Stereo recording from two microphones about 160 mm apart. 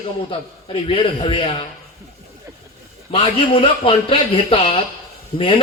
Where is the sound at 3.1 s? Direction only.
35° left (ahead or behind).